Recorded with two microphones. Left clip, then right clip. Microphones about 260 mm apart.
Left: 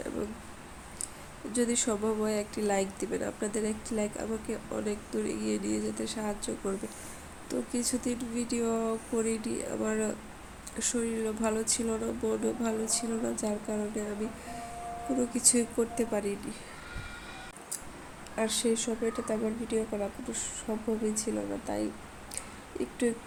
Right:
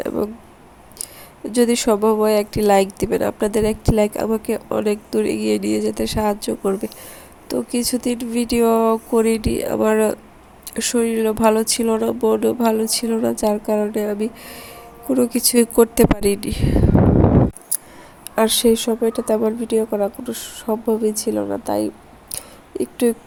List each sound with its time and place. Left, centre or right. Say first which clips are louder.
1.5 s speech: right 14 dB; right
18.3 s speech: right 14 dB; right